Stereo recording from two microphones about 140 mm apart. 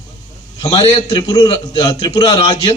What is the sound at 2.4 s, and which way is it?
Speech, 45° left (ahead or behind).